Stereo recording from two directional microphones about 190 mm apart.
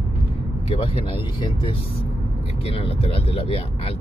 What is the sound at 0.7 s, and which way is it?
Speech, 30° left (ahead or behind).